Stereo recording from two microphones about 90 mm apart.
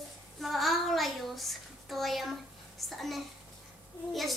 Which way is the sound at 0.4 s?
Centre (ahead or behind).